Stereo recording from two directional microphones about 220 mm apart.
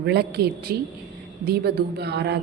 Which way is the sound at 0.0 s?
45° right (ahead or behind).